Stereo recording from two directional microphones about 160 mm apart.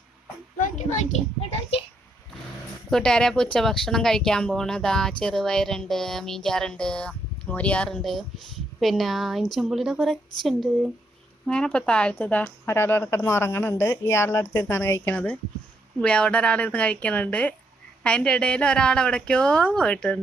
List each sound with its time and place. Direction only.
0.6 s a child's voice: 50° left (ahead or behind)
2.9 s a woman's voice: 5° left (ahead or behind)